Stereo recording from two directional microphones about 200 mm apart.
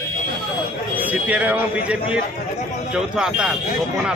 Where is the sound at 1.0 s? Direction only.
5° right (ahead or behind).